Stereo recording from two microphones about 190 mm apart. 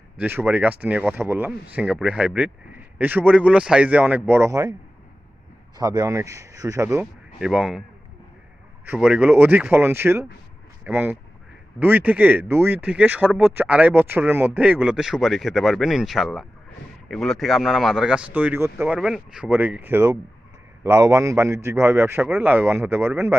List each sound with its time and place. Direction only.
0.2 s speech: 10° right (ahead or behind)
5.7 s speech: 20° right (ahead or behind)
7.3 s speech: 5° right (ahead or behind)